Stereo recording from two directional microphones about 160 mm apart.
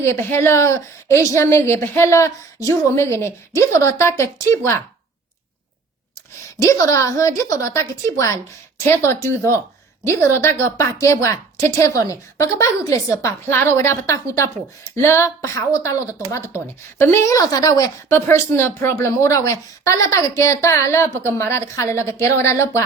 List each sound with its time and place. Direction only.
0.0 s a woman's voice: 15° left (ahead or behind)
6.6 s a woman's voice: 20° left (ahead or behind)